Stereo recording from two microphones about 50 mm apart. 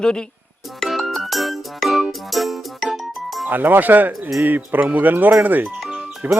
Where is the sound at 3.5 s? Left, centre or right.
Right.